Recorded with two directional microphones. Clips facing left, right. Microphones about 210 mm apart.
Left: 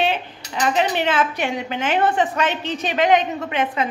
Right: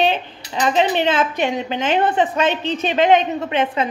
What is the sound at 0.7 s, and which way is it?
A woman's voice, 25° right (ahead or behind).